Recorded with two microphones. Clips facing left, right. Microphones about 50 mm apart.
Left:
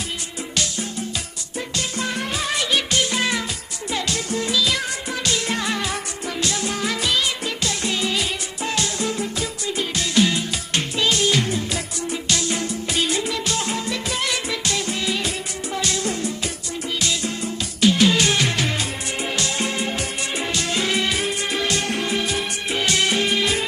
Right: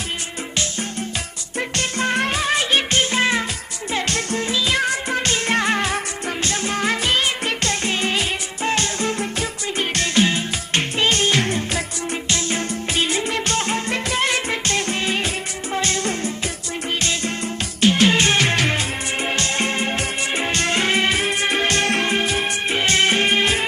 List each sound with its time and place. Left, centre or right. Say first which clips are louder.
1.5 s music: right 3 dB; right
2.4 s music: right 3 dB; right
3.9 s music: right 2 dB; right
4.4 s music: right 2 dB; right
12.3 s music: even; right
13.3 s music: right 3 dB; right
17.8 s music: right 1 dB; right
21.2 s music: right 3 dB; right
21.8 s music: right 4 dB; right
22.1 s music: right 3 dB; right